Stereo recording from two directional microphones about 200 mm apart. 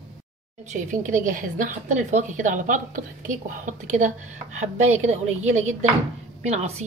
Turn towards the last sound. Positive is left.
turn(degrees=-35)  # may be behind; listen again after turning